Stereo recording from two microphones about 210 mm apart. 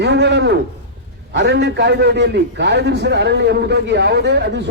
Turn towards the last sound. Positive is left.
turn(degrees=-55)  # may be behind; listen again after turning